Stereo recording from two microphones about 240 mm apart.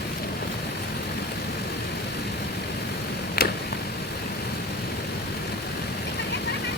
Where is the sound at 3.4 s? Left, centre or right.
Left.